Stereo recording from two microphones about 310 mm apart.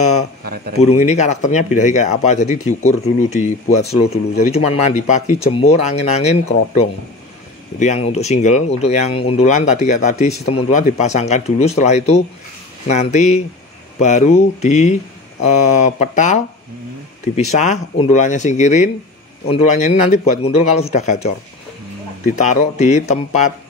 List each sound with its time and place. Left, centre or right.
0.7 s speech: left